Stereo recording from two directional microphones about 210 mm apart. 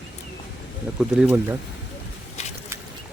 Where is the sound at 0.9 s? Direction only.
5° right (ahead or behind).